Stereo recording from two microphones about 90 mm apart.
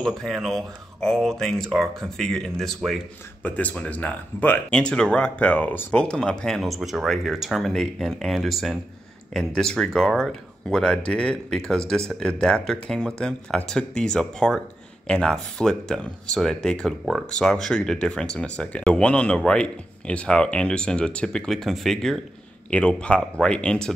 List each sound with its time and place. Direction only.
0.0 s speech: centre (ahead or behind)
3.4 s speech: 15° left (ahead or behind)
5.9 s speech: 10° left (ahead or behind)